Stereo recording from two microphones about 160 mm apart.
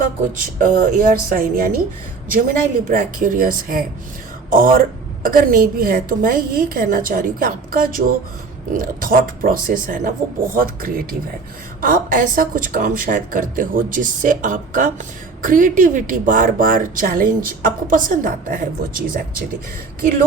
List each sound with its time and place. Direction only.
0.0 s a woman's voice: 55° right (ahead or behind)